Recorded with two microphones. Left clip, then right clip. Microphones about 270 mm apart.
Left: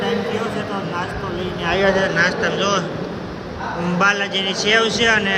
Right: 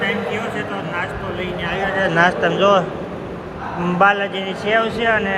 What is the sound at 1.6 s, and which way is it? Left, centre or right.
Speech, left.